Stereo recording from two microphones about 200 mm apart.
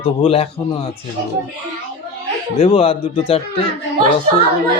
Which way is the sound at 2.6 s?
30° left (ahead or behind).